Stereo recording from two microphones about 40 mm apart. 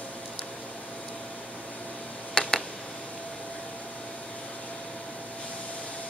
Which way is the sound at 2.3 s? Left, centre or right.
Centre.